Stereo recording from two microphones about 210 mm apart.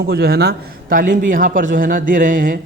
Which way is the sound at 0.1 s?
50° right (ahead or behind).